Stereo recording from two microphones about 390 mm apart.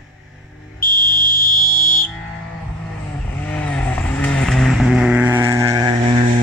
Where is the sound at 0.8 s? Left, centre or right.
Left.